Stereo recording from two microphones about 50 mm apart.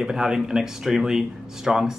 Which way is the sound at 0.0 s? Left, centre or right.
Centre.